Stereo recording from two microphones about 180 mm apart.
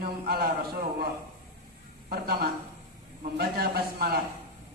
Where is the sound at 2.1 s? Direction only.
60° right (ahead or behind).